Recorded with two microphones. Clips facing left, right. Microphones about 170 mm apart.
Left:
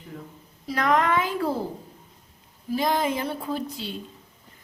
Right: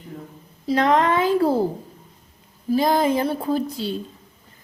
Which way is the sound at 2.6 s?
35° right (ahead or behind).